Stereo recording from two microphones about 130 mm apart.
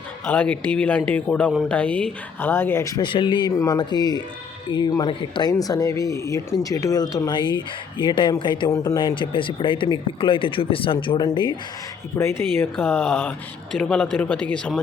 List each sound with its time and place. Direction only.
0.3 s speech: 10° left (ahead or behind); by 3.5 s 35° left (ahead or behind)
3.5 s speech: 25° left (ahead or behind)
8.7 s speech: 25° left (ahead or behind)
9.0 s speech: 35° left (ahead or behind)
12.1 s speech: 20° left (ahead or behind)